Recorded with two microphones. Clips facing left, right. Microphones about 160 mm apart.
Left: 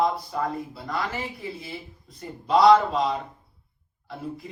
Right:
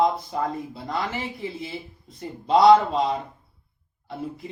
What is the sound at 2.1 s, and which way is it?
Speech, 25° right (ahead or behind).